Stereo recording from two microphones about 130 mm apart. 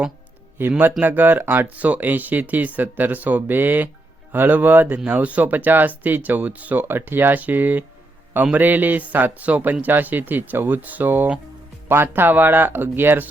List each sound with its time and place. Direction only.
0.7 s speech: 10° right (ahead or behind)